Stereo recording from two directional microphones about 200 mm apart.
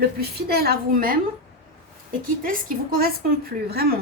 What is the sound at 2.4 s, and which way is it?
A woman's voice, 45° right (ahead or behind).